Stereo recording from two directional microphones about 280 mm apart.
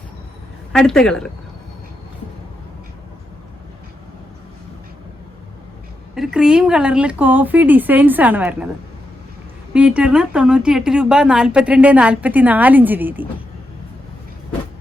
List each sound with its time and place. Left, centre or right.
0.7 s speech: centre
6.1 s speech: centre
9.7 s speech: centre